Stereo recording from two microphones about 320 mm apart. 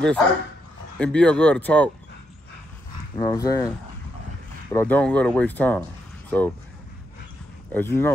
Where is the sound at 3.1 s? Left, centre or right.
Centre.